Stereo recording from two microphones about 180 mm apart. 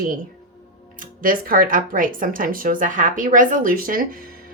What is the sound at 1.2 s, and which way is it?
A woman's voice, 50° right (ahead or behind).